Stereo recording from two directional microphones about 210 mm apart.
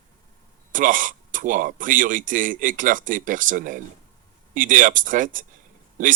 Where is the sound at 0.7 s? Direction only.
40° right (ahead or behind).